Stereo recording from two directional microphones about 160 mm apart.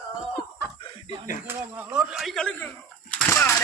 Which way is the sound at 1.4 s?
10° right (ahead or behind).